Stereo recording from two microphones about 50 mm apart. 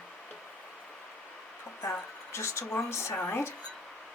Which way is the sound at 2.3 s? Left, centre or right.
Left.